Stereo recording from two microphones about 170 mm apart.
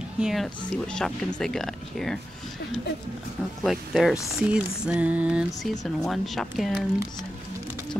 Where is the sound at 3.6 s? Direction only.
Centre (ahead or behind).